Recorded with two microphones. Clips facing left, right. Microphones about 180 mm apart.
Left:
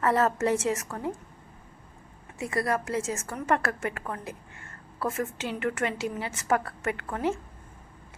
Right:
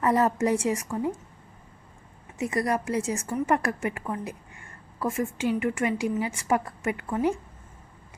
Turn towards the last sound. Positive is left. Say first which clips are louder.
# right 3 dB
turn(degrees=-15)  # may be behind; listen again after turning